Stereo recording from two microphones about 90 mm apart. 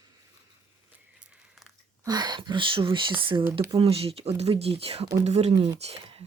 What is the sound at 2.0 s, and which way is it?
Speech, 50° right (ahead or behind).